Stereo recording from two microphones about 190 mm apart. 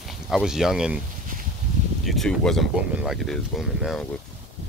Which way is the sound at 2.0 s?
Centre (ahead or behind).